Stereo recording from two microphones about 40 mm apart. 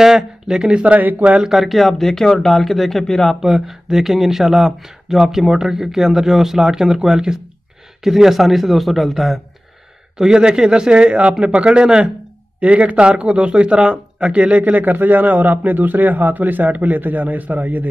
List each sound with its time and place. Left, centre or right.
0.0 s speech: centre
0.8 s speech: right
1.4 s speech: centre
3.4 s speech: centre
10.1 s speech: centre; by 17.8 s right